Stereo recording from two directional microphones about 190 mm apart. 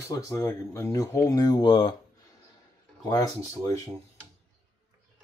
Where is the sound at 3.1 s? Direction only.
15° left (ahead or behind).